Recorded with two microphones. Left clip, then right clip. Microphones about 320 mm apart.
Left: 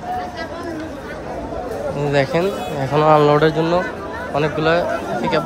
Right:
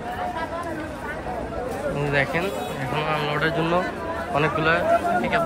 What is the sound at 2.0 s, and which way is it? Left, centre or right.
Speech, centre.